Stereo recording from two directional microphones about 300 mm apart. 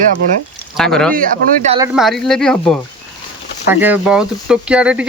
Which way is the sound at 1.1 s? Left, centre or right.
Right.